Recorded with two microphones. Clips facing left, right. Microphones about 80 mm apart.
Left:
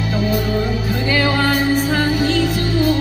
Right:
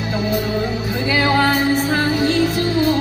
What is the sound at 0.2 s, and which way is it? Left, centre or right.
Music, right.